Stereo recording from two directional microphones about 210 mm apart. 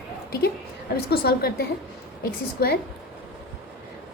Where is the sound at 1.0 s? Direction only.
45° left (ahead or behind).